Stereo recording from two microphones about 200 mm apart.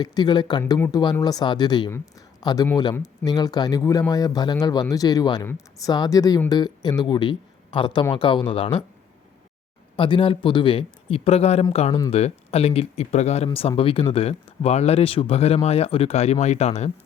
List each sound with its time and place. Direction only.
0.0 s speech: 20° left (ahead or behind)
9.9 s speech: 25° left (ahead or behind)